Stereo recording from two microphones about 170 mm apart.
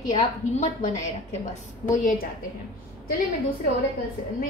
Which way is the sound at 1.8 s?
50° left (ahead or behind).